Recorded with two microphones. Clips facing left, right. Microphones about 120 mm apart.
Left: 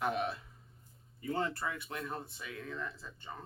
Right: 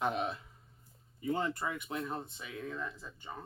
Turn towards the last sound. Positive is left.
turn(degrees=-10)  # may be behind; listen again after turning